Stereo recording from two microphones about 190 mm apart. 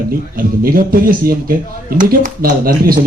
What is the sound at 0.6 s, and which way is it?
Speech, 50° right (ahead or behind).